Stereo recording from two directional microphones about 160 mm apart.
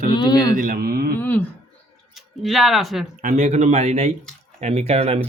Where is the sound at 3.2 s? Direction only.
50° right (ahead or behind).